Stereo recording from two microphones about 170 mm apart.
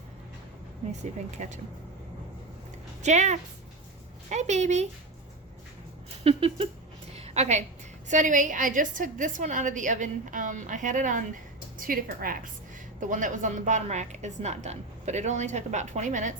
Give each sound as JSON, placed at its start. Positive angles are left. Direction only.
{"t": 1.4, "sound": "a woman's voice", "side_deg": -45}
{"t": 3.0, "sound": "a woman's voice", "side_deg": -45}
{"t": 6.2, "sound": "a sound", "side_deg": -35}
{"t": 8.0, "sound": "a woman's voice", "side_deg": -45}